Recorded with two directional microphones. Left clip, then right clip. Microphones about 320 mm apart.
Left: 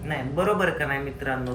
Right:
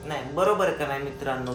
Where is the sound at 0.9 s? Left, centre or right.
Centre.